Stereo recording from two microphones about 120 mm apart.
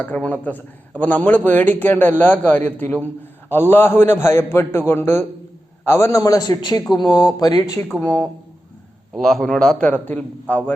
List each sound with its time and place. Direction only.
0.0 s a man's voice: 10° left (ahead or behind); by 7.8 s 30° left (ahead or behind)
8.0 s a man's voice: 15° left (ahead or behind)